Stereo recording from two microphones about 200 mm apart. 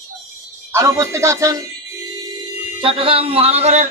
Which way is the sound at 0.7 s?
15° right (ahead or behind).